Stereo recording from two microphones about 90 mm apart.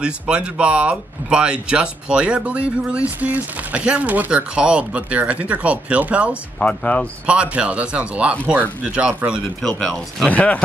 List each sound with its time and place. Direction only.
0.0 s speech: 10° right (ahead or behind)
6.6 s speech: 15° left (ahead or behind)
7.2 s speech: 15° right (ahead or behind)
9.6 s speech: 5° left (ahead or behind)